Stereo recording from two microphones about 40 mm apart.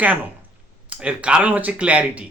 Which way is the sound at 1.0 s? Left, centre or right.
Right.